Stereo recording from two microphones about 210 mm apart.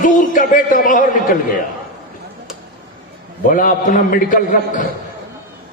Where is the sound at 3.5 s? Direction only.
40° left (ahead or behind).